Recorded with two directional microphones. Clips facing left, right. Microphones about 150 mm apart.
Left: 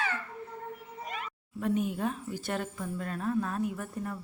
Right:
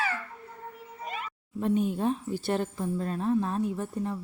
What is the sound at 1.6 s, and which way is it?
A woman's voice, 30° right (ahead or behind).